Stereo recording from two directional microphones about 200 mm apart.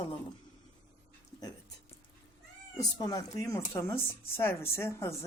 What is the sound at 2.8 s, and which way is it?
Speech, 20° left (ahead or behind).